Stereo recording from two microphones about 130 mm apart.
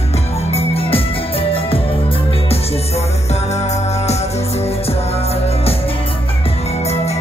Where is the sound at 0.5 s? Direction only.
50° left (ahead or behind).